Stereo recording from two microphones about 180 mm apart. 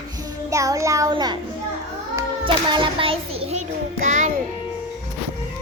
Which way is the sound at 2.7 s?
30° right (ahead or behind).